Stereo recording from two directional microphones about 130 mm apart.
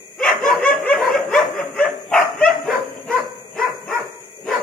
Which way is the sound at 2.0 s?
10° left (ahead or behind).